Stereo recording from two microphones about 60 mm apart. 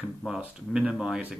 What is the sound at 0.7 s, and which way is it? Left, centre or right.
Speech, centre.